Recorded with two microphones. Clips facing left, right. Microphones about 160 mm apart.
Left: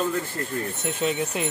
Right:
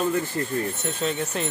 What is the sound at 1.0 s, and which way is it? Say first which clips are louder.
Speech: left 1 dB; 10° left (ahead or behind).